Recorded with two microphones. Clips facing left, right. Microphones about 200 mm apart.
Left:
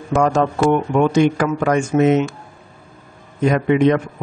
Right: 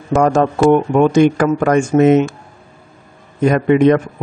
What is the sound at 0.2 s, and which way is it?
A man's voice, 45° right (ahead or behind).